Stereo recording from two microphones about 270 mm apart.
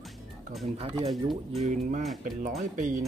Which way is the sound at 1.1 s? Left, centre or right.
Centre.